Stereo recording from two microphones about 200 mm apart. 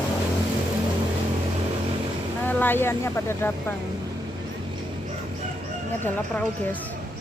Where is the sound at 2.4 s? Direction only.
10° left (ahead or behind).